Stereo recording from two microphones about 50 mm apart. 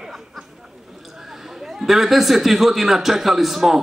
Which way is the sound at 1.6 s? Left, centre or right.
Centre.